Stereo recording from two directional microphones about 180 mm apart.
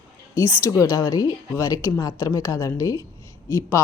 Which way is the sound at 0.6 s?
15° left (ahead or behind).